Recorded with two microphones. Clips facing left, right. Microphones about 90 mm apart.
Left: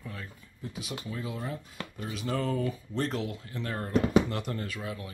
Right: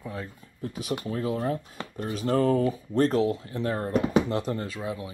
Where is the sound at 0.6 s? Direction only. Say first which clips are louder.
Right 7 dB; 50° right (ahead or behind).